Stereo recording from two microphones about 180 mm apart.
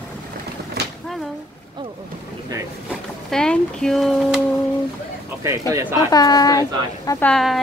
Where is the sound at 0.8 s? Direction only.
65° right (ahead or behind).